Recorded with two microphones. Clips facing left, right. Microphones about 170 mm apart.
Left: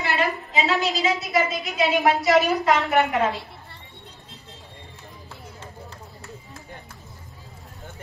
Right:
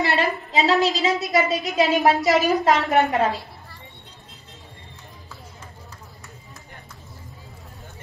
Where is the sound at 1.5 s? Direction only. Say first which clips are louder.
Right 3 dB; 40° right (ahead or behind).